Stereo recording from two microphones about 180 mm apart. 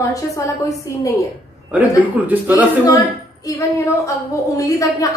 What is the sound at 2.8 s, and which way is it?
A woman's voice, 20° left (ahead or behind).